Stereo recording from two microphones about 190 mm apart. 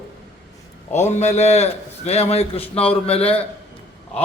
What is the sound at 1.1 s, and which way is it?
A man's voice, 35° left (ahead or behind).